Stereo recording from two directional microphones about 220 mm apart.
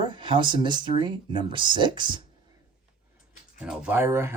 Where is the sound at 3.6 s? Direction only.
5° right (ahead or behind).